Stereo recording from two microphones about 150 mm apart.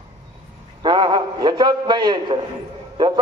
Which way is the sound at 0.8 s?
30° right (ahead or behind).